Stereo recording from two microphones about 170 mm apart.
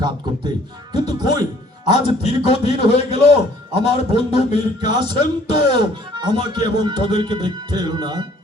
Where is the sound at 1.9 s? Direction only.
40° left (ahead or behind).